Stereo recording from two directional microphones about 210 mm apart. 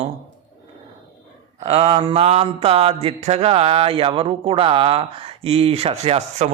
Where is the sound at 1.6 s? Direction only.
30° right (ahead or behind).